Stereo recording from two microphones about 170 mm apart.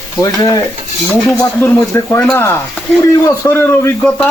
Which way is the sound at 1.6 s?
15° left (ahead or behind).